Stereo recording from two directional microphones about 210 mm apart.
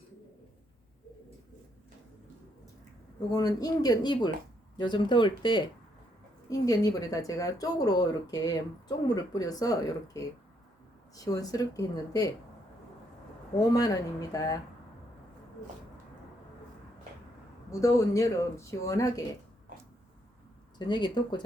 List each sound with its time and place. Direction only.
3.3 s speech: 20° left (ahead or behind)
13.7 s speech: 15° left (ahead or behind)
17.7 s speech: 15° left (ahead or behind)
20.7 s speech: 20° left (ahead or behind)